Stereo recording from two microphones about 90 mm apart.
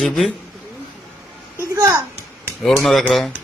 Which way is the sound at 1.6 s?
35° right (ahead or behind).